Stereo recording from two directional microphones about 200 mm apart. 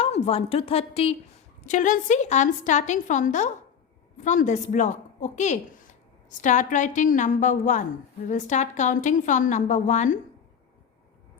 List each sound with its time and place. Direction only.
0.0 s a woman's voice: 30° left (ahead or behind)